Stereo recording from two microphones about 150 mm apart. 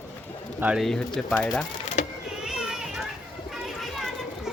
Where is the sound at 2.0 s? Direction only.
55° left (ahead or behind).